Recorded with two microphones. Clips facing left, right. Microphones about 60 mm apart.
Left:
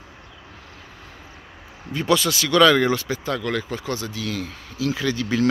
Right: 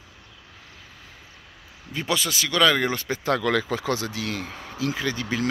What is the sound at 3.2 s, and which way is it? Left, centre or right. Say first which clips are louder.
Speech: right 2 dB; right.